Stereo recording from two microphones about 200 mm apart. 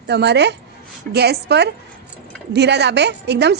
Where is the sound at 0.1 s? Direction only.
60° right (ahead or behind).